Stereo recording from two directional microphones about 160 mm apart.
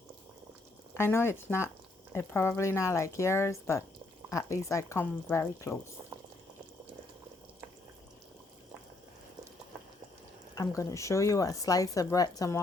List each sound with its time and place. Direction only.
0.9 s speech: 15° left (ahead or behind)
10.5 s speech: 20° left (ahead or behind)